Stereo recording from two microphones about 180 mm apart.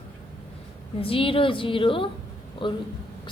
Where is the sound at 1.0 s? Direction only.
30° left (ahead or behind).